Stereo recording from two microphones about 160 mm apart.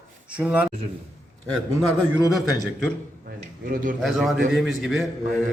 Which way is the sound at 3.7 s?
60° right (ahead or behind).